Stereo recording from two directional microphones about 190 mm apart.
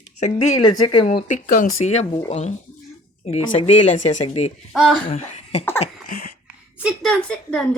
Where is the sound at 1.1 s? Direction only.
45° left (ahead or behind).